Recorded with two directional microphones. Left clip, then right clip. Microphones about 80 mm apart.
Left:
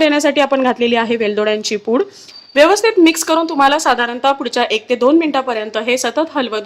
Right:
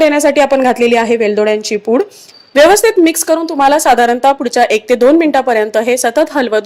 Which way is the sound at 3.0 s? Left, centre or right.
Right.